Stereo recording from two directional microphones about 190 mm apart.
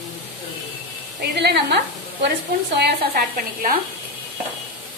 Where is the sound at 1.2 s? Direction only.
60° right (ahead or behind).